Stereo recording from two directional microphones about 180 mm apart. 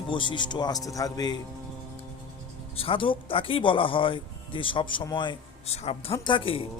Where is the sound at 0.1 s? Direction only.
25° left (ahead or behind).